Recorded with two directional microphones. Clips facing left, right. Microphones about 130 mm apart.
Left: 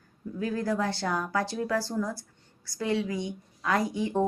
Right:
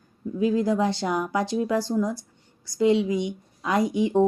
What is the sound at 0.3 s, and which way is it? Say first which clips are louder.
A woman's voice: right 7 dB; 15° right (ahead or behind).